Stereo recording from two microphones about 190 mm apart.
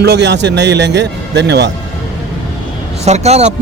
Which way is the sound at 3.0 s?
35° right (ahead or behind).